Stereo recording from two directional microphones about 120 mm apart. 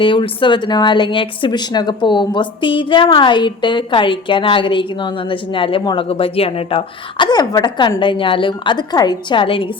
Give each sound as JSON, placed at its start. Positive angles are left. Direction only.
{"t": 0.0, "sound": "speech", "side_deg": 45}
{"t": 6.1, "sound": "speech", "side_deg": 50}
{"t": 7.3, "sound": "a woman's voice", "side_deg": 35}